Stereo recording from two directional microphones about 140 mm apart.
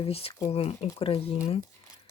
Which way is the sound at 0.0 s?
45° left (ahead or behind).